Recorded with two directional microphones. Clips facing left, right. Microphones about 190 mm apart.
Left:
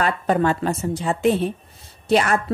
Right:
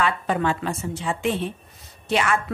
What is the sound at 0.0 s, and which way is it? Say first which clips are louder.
A woman's voice: left 3 dB; 45° left (ahead or behind).